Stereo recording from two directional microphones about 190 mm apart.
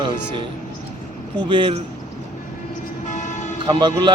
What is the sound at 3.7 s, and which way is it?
Speech, 20° right (ahead or behind).